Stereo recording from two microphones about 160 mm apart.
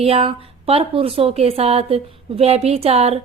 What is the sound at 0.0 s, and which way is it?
Speech, 35° right (ahead or behind).